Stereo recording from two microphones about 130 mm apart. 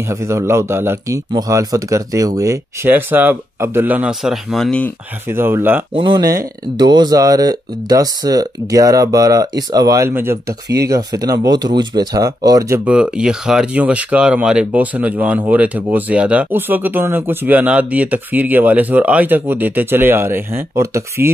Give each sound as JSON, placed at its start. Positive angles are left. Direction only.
{"t": 0.1, "sound": "speech", "side_deg": -20}
{"t": 5.3, "sound": "speech", "side_deg": -20}
{"t": 5.9, "sound": "speech", "side_deg": -35}
{"t": 10.0, "sound": "speech", "side_deg": -20}
{"t": 10.9, "sound": "speech", "side_deg": -30}
{"t": 12.8, "sound": "speech", "side_deg": -10}